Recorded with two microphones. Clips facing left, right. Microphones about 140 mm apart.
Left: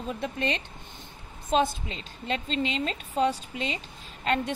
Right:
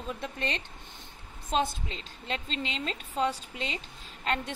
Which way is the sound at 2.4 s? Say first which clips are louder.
Left 6 dB; 20° left (ahead or behind).